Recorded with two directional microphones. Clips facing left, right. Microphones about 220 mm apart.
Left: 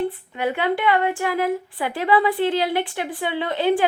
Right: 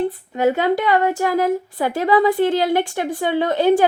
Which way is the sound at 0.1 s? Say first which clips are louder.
Right 7 dB; 40° right (ahead or behind).